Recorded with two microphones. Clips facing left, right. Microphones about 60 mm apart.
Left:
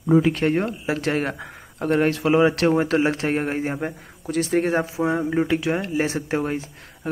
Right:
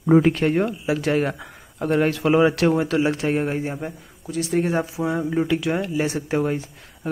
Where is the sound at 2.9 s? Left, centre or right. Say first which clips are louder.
Even; left.